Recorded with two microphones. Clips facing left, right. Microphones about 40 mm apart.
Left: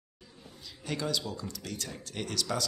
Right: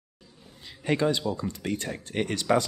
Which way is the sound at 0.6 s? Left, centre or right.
Right.